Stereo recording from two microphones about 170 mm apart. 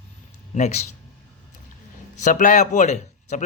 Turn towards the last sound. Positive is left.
turn(degrees=45)  # may be behind; listen again after turning